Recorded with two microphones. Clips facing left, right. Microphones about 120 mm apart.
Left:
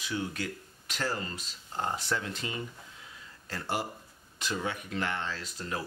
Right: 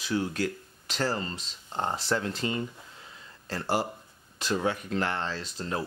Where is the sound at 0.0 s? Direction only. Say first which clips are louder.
Right 6 dB; 35° right (ahead or behind).